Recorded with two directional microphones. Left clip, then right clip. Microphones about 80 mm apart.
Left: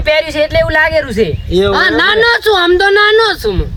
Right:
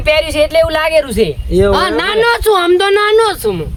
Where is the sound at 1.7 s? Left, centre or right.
Centre.